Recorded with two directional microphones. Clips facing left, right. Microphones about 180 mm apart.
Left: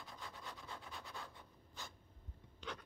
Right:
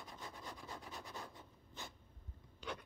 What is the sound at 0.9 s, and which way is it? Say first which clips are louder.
Scratch: right 2 dB; 20° right (ahead or behind).